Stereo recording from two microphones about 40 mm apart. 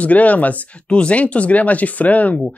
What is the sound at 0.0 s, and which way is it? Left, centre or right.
Speech, left.